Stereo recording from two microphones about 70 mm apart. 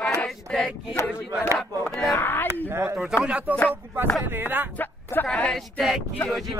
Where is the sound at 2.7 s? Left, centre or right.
Right.